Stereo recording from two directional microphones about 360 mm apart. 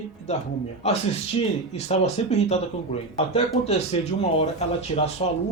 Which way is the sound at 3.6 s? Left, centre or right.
Centre.